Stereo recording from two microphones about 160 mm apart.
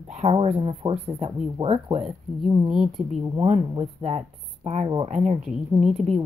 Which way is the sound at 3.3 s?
40° right (ahead or behind).